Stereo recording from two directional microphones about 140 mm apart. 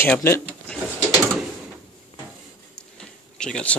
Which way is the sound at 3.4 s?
5° left (ahead or behind).